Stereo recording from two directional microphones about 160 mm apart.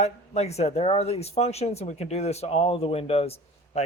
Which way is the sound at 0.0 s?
40° left (ahead or behind).